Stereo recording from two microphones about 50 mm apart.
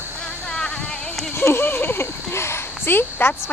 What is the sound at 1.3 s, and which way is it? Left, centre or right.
Speech, left.